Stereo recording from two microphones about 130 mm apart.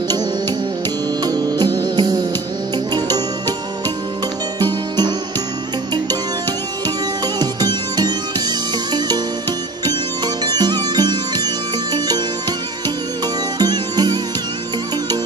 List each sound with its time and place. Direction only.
1.2 s music: 30° right (ahead or behind)
4.6 s music: 35° right (ahead or behind)
7.3 s music: 30° right (ahead or behind)
13.6 s music: 30° right (ahead or behind)